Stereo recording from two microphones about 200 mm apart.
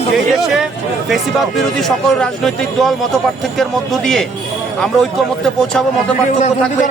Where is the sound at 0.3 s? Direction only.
Centre (ahead or behind).